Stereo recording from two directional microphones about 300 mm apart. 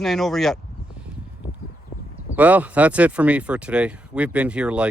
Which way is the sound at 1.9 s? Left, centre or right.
Left.